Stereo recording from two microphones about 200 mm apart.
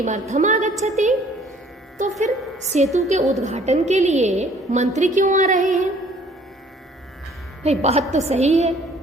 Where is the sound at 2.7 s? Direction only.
35° right (ahead or behind).